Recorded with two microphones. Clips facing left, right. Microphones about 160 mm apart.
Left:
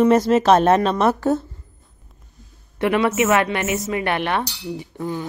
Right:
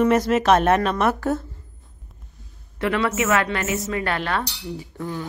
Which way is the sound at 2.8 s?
20° left (ahead or behind).